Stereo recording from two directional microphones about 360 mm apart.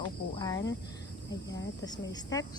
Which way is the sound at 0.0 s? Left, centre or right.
Centre.